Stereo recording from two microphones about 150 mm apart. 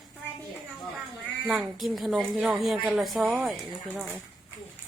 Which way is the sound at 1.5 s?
Centre (ahead or behind).